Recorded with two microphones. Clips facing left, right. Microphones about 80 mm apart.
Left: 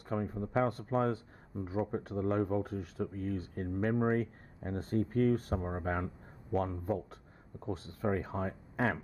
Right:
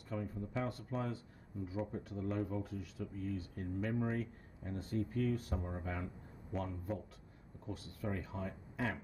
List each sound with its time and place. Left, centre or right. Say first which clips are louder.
0.1 s speech: left 8 dB; left